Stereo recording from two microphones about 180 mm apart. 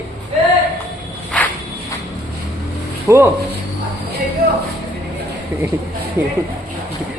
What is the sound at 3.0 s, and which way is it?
Speech, 15° right (ahead or behind).